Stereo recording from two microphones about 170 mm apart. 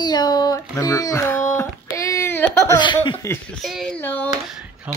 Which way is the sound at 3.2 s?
15° left (ahead or behind).